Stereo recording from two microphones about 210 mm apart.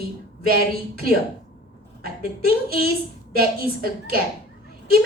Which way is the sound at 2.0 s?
45° right (ahead or behind).